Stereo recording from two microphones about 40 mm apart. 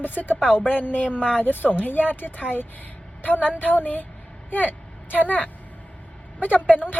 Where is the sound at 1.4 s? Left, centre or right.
Left.